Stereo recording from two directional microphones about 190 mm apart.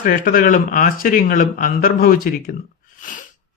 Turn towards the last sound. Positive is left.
turn(degrees=45)  # may be behind; listen again after turning